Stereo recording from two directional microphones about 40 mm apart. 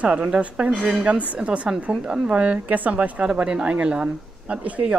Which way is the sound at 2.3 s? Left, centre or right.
Right.